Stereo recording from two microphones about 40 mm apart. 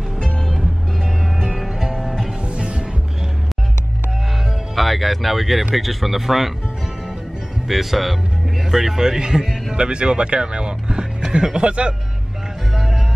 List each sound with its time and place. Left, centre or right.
1.4 s music: centre
2.4 s music: right
4.7 s speech: centre
7.6 s speech: centre; by 11.9 s right
12.7 s music: centre